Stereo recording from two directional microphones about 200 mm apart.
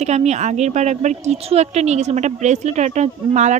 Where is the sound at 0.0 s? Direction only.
35° right (ahead or behind).